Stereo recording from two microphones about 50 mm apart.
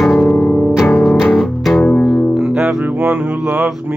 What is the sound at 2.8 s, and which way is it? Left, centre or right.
Music, right.